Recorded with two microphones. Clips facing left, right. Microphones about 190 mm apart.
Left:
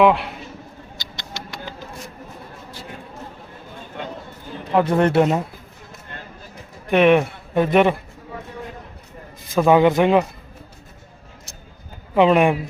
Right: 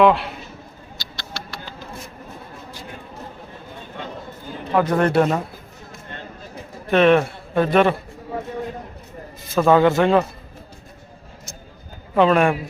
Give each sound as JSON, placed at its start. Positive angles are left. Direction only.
{"t": 0.0, "sound": "a man's voice", "side_deg": 10}
{"t": 1.1, "sound": "rodents", "side_deg": 20}
{"t": 4.7, "sound": "speech", "side_deg": 25}
{"t": 6.8, "sound": "speech", "side_deg": 15}
{"t": 9.6, "sound": "a man's voice", "side_deg": 15}
{"t": 12.1, "sound": "a man's voice", "side_deg": 15}